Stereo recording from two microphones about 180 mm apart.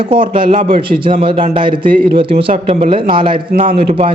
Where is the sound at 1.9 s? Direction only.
50° right (ahead or behind).